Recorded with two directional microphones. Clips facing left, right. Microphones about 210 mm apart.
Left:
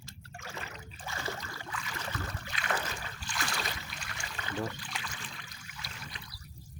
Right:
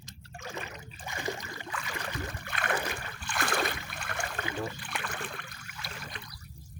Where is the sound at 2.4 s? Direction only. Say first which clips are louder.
Right 4 dB; 55° right (ahead or behind).